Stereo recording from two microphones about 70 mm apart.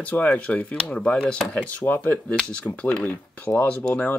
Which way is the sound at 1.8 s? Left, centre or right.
Left.